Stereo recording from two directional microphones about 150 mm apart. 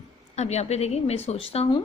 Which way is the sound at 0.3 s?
45° left (ahead or behind).